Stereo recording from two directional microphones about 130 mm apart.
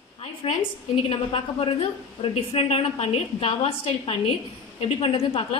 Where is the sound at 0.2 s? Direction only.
50° left (ahead or behind).